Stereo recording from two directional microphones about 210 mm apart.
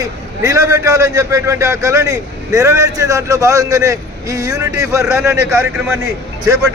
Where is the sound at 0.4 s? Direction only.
15° right (ahead or behind).